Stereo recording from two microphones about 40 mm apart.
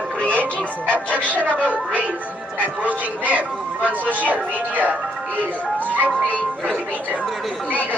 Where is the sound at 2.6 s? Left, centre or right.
Right.